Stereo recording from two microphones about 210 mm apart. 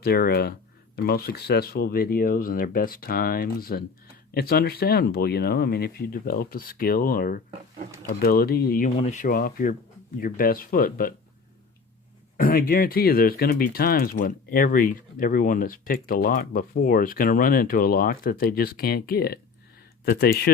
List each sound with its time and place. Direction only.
0.0 s speech: 45° left (ahead or behind)
9.0 s speech: 35° left (ahead or behind)
12.4 s speech: 45° left (ahead or behind)